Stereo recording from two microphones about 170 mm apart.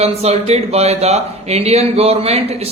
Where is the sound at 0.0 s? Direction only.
40° right (ahead or behind).